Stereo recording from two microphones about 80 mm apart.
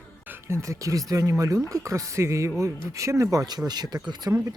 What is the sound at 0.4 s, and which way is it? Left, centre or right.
Speech, right.